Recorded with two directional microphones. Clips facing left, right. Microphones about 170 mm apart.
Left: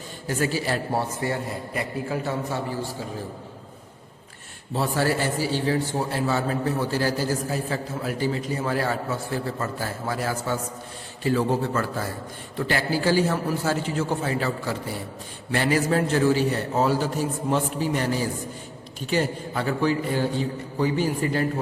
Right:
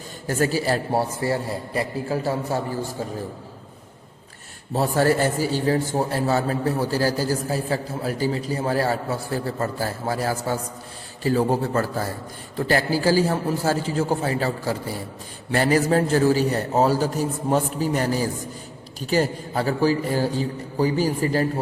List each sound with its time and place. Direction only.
0.3 s a man's voice: 40° right (ahead or behind)
4.7 s a man's voice: 45° right (ahead or behind)